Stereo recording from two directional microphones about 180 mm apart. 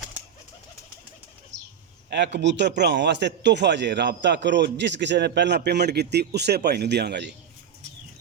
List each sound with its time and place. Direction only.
2.0 s a man's voice: 70° right (ahead or behind)